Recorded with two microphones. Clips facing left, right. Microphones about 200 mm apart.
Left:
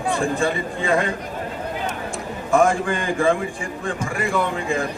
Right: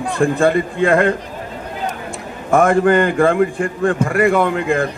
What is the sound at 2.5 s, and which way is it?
A man's voice, 60° right (ahead or behind).